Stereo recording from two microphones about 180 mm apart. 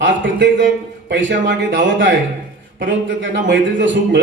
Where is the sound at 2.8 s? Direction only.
85° right.